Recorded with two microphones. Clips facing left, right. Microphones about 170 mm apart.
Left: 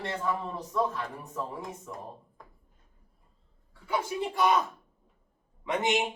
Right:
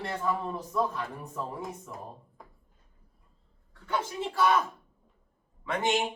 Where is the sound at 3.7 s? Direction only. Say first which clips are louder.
Left 1 dB; 10° left (ahead or behind).